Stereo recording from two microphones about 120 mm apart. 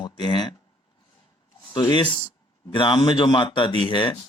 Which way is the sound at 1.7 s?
40° left (ahead or behind).